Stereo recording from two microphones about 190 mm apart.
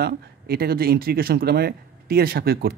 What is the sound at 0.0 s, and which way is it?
Speech, 55° right (ahead or behind).